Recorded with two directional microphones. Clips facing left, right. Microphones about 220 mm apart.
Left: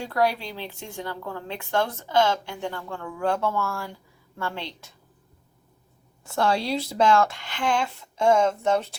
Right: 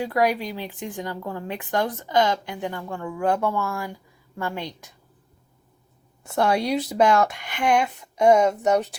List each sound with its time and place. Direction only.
0.0 s a woman's voice: 15° right (ahead or behind)
6.2 s a woman's voice: 20° right (ahead or behind)